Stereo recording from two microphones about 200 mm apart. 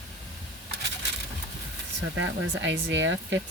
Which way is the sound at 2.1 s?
70° right (ahead or behind).